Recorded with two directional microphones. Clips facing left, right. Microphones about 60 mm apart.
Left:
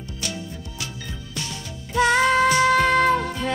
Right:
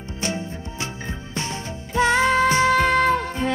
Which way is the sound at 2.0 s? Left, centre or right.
Right.